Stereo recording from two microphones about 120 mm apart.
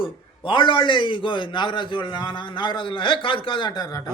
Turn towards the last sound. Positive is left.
turn(degrees=35)  # may be behind; listen again after turning